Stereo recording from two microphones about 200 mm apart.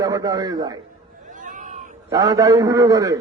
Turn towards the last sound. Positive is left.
turn(degrees=-15)  # may be behind; listen again after turning